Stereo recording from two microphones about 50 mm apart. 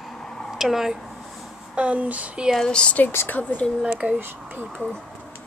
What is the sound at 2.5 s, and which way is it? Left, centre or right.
Speech, centre.